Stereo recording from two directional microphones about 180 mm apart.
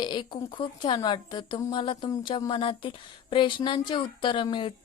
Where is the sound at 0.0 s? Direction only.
25° left (ahead or behind).